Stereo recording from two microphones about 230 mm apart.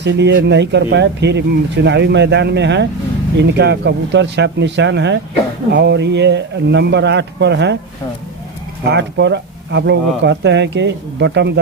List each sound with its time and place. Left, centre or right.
0.0 s speech: right
8.9 s speech: right